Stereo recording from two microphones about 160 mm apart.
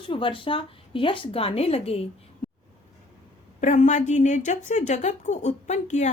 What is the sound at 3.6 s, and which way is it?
A woman's voice, 50° left (ahead or behind).